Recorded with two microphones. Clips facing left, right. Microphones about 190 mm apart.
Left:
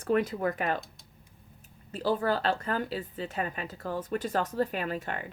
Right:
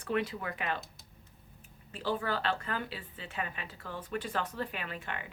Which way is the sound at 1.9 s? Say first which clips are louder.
Left 6 dB; 40° left (ahead or behind).